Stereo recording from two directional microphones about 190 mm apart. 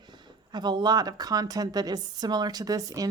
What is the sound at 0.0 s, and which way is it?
Speech, 25° right (ahead or behind).